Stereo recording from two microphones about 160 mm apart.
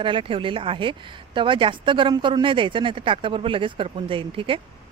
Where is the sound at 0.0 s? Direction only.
30° right (ahead or behind).